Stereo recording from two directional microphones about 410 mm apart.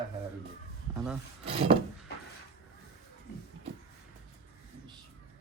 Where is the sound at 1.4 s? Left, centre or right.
Centre.